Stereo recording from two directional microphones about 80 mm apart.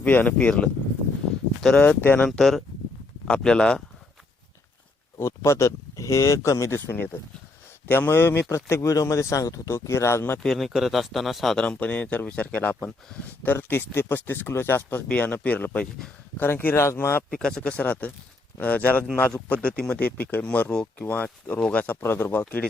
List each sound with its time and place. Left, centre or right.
0.0 s speech: left
2.4 s speech: centre
5.2 s speech: left
6.7 s speech: left
10.4 s speech: centre
11.5 s speech: centre; by 17.2 s left
17.3 s speech: centre
22.0 s speech: left